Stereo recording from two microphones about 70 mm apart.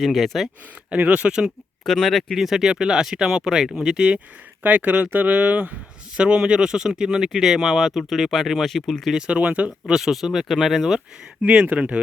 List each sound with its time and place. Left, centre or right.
0.0 s speech: centre
0.9 s speech: right
1.8 s speech: centre
9.1 s speech: centre
11.4 s speech: centre